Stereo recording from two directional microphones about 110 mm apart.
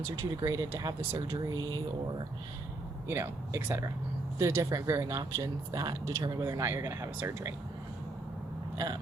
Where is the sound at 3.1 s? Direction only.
25° right (ahead or behind).